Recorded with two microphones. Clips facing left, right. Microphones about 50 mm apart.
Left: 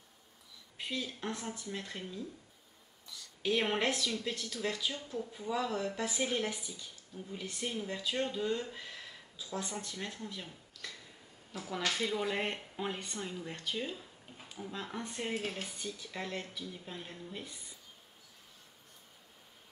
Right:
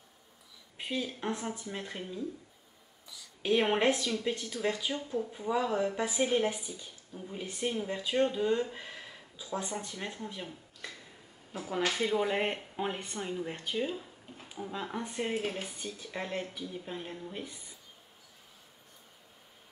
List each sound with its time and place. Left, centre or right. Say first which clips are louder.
0.7 s speech: right 4 dB; centre
3.5 s speech: right 6 dB; centre